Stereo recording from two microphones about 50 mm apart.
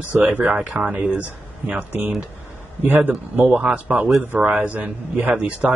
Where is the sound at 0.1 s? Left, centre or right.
Right.